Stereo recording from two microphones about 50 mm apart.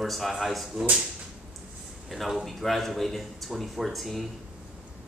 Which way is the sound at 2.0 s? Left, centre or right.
Centre.